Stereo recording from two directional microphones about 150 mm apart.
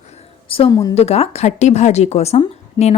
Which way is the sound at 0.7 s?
25° left (ahead or behind).